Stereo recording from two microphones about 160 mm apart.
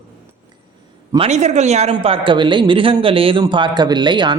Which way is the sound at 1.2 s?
45° right (ahead or behind).